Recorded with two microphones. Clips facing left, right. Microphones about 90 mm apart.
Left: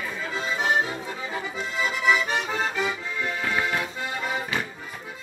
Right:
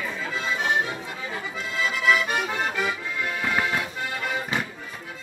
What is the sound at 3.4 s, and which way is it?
Music, 5° right (ahead or behind).